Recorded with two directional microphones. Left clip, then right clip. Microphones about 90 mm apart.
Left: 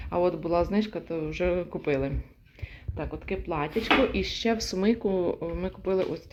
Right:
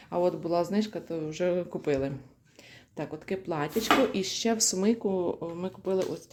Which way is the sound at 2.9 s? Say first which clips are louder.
Left 1 dB; 45° right (ahead or behind).